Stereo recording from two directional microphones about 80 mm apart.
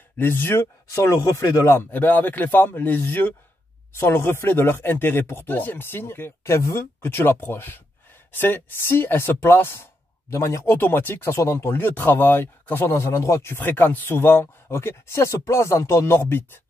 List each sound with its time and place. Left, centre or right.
0.2 s speech: left
1.9 s speech: left
10.3 s speech: left
10.7 s speech: left
13.0 s speech: left